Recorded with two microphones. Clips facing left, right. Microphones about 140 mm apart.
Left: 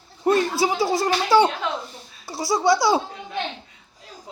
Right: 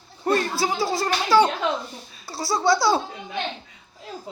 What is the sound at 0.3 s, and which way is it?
Speech, 20° left (ahead or behind).